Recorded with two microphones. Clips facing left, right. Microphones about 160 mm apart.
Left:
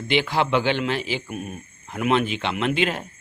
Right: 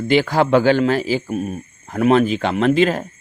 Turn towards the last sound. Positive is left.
turn(degrees=-40)  # may be behind; listen again after turning